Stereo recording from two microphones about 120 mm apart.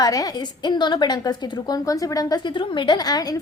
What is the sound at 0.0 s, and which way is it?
A woman's voice, 30° left (ahead or behind).